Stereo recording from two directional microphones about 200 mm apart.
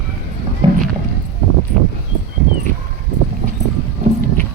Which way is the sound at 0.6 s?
25° right (ahead or behind).